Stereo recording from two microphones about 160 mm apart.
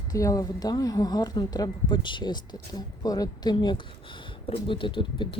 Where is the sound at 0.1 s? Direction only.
20° left (ahead or behind).